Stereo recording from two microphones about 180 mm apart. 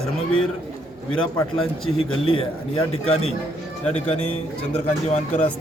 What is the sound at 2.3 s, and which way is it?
Speech, 30° left (ahead or behind).